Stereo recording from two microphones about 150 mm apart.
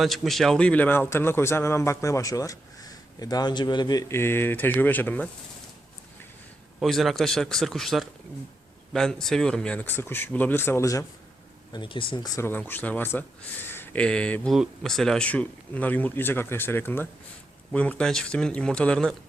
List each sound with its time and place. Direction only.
0.0 s a man's voice: centre (ahead or behind)
6.7 s a man's voice: centre (ahead or behind); by 11.0 s 20° left (ahead or behind)
11.7 s a man's voice: 35° left (ahead or behind); by 19.1 s 5° left (ahead or behind)